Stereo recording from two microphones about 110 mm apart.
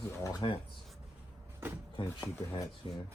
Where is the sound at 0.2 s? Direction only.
30° left (ahead or behind).